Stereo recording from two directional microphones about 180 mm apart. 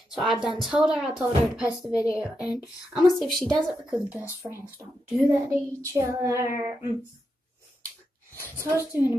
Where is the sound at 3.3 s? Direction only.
25° right (ahead or behind).